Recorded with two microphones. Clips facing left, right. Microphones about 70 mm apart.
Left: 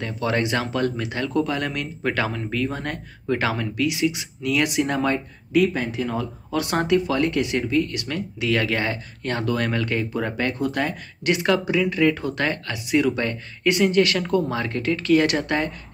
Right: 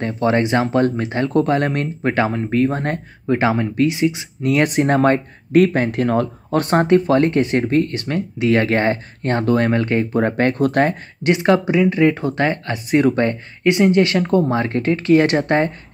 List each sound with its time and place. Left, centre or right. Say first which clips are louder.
0.0 s speech: right 6 dB; right
1.3 s speech: right 7 dB; right
4.4 s speech: right 5 dB; right
11.2 s speech: right 5 dB; right